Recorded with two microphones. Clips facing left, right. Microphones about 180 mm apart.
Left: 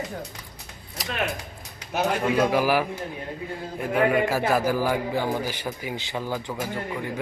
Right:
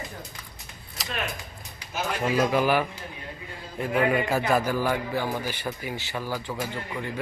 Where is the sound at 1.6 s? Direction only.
65° left (ahead or behind).